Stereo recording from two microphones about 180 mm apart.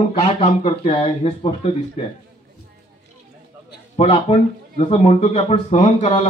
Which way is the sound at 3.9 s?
40° left (ahead or behind).